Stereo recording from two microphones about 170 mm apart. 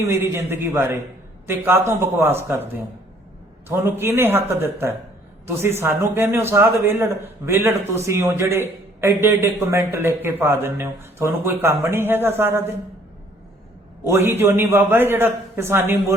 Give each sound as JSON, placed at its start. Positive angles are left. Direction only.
{"t": 0.0, "sound": "a man's voice", "side_deg": -15}
{"t": 14.0, "sound": "a man's voice", "side_deg": -15}